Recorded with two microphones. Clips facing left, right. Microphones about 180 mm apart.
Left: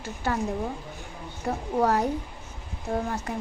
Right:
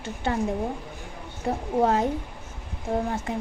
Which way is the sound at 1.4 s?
25° right (ahead or behind).